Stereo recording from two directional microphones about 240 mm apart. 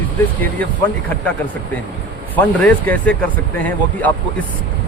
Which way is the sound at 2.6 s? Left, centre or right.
Centre.